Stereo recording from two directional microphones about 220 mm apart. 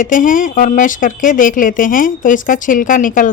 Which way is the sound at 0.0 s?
35° left (ahead or behind).